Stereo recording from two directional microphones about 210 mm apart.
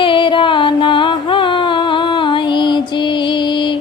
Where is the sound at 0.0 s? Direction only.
25° left (ahead or behind).